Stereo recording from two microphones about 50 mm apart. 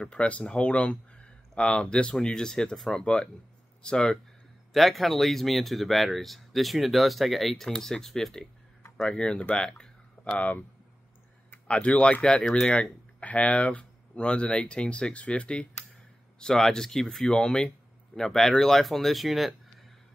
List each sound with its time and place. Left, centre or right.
0.0 s speech: left
4.7 s speech: centre
9.0 s speech: centre
10.2 s speech: left
11.6 s speech: left
16.3 s speech: centre